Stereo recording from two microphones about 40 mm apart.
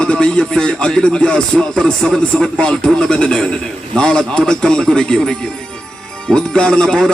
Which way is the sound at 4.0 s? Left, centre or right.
Centre.